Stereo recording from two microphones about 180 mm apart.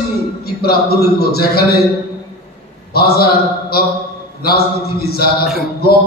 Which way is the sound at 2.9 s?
60° left (ahead or behind).